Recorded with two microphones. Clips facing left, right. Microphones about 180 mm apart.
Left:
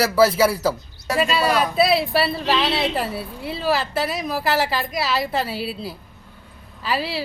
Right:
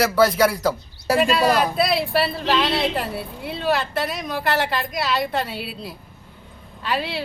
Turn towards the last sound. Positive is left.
turn(degrees=0)  # may be behind; listen again after turning